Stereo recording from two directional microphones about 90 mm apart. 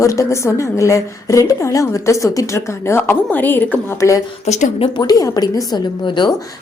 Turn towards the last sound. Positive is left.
turn(degrees=60)  # may be behind; listen again after turning